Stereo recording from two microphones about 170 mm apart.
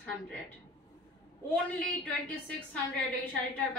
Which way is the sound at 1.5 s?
5° left (ahead or behind).